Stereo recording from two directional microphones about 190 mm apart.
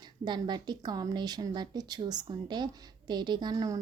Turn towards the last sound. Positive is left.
turn(degrees=-20)  # may be behind; listen again after turning